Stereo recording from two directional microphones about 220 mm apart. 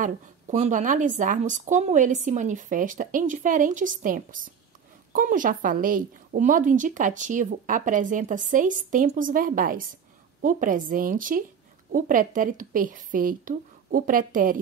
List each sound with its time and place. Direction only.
0.0 s a woman's voice: 35° right (ahead or behind)